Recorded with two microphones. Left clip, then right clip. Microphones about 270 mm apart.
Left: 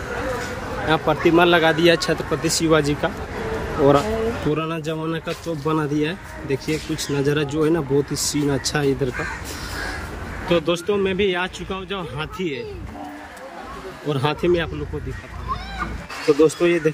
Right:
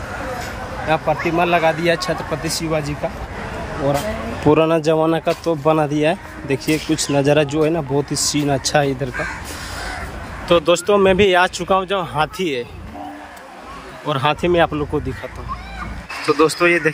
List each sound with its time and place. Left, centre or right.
0.8 s speech: centre
4.6 s speech: centre
10.5 s speech: centre
14.0 s speech: centre
16.4 s speech: centre